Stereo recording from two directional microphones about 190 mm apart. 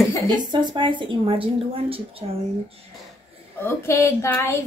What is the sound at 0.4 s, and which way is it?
A woman's voice, 25° right (ahead or behind).